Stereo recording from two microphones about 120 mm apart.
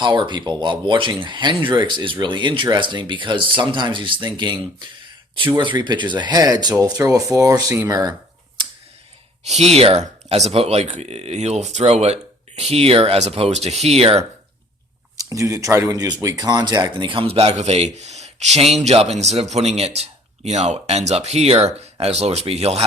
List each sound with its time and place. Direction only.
0.0 s speech: 40° right (ahead or behind)
9.4 s speech: 65° right (ahead or behind)
15.2 s speech: 30° right (ahead or behind); by 22.8 s 60° right (ahead or behind)